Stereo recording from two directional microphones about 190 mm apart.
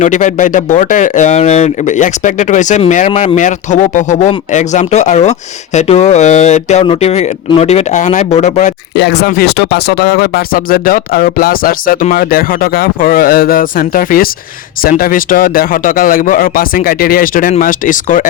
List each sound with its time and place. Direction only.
0.0 s speech: 40° left (ahead or behind)
9.0 s speech: 60° left (ahead or behind); by 18.3 s 45° left (ahead or behind)